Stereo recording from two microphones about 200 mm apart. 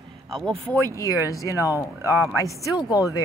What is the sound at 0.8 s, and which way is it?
Speech, 15° left (ahead or behind).